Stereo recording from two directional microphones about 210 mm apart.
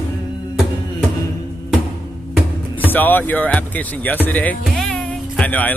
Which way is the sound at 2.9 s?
10° left (ahead or behind).